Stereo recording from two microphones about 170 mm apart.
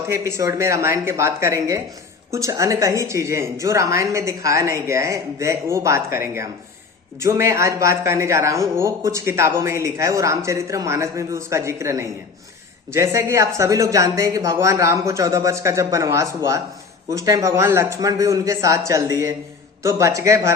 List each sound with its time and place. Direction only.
0.1 s speech: 15° right (ahead or behind)